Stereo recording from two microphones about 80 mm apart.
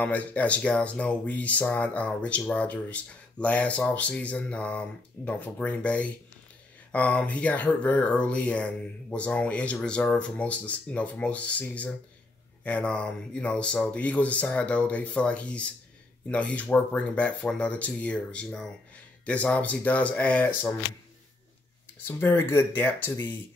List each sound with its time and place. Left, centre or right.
0.0 s speech: centre
22.0 s speech: left